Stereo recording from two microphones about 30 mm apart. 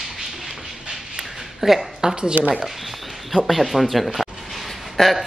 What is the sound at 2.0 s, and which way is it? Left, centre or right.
Speech, right.